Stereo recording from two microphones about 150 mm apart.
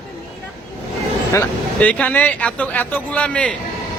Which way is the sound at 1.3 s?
10° left (ahead or behind).